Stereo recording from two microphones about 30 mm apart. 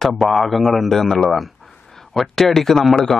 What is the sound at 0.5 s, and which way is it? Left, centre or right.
Speech, centre.